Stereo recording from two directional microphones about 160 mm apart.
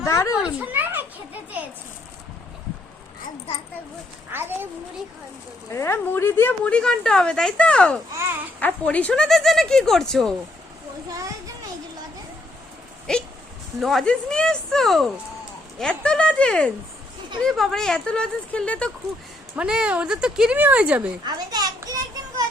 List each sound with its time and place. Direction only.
0.0 s a sound: 15° left (ahead or behind)
0.6 s children playing: 10° right (ahead or behind)
4.3 s speech: 15° right (ahead or behind)
5.7 s a woman's voice: 15° left (ahead or behind)
8.1 s speech: 15° right (ahead or behind)
8.6 s speech: 10° left (ahead or behind)
13.7 s speech: centre (ahead or behind)
19.5 s speech: 5° right (ahead or behind)
21.2 s a child's voice: 25° right (ahead or behind)